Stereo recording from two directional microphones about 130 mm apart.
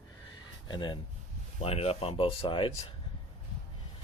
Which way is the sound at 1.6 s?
50° left (ahead or behind).